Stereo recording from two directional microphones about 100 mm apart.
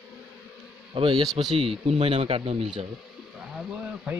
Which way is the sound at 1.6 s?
85° right.